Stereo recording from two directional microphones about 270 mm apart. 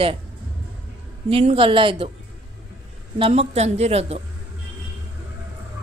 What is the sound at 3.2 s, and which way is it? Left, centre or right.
Speech, right.